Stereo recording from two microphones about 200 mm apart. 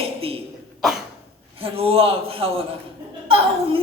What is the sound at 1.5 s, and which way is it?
A woman's voice, 30° right (ahead or behind).